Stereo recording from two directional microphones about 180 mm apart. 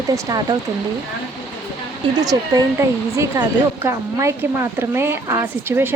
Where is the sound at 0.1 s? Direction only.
20° right (ahead or behind).